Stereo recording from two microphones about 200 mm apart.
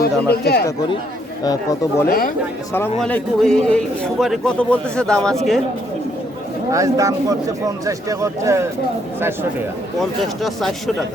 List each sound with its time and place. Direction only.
0.0 s speech: 55° left (ahead or behind)
1.5 s speech: 15° left (ahead or behind)
2.0 s speech: 45° left (ahead or behind)
2.7 s a man's voice: 10° left (ahead or behind)
6.7 s speech: 15° right (ahead or behind)
10.0 s a man's voice: centre (ahead or behind)